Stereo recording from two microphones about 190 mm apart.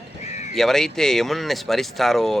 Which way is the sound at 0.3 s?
35° left (ahead or behind).